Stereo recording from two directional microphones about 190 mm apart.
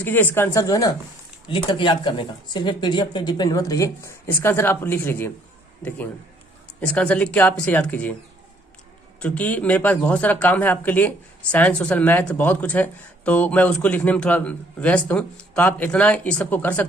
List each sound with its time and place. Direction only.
0.0 s speech: 10° left (ahead or behind)
9.2 s speech: 5° left (ahead or behind)